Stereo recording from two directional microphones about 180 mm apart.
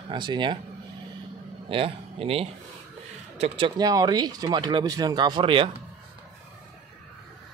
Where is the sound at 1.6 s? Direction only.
30° right (ahead or behind).